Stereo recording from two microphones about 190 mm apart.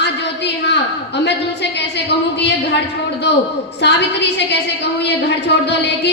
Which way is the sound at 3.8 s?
65° left (ahead or behind).